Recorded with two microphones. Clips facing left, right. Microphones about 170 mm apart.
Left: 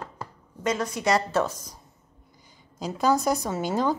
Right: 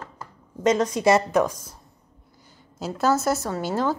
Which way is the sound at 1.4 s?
10° right (ahead or behind).